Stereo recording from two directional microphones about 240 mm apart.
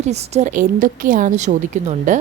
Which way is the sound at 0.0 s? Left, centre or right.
Right.